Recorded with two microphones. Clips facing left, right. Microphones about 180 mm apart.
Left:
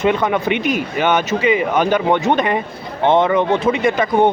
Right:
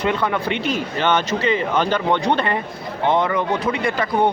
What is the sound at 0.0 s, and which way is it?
A man's voice, 20° left (ahead or behind).